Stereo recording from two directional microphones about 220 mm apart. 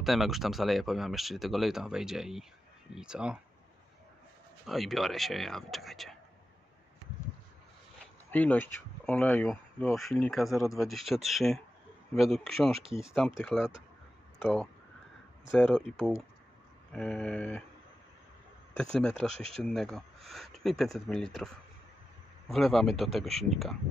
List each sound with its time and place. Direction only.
0.0 s speech: centre (ahead or behind)
4.6 s speech: centre (ahead or behind)
8.3 s speech: 5° left (ahead or behind)
12.7 s speech: 25° right (ahead or behind)
13.0 s speech: centre (ahead or behind)
19.2 s speech: centre (ahead or behind)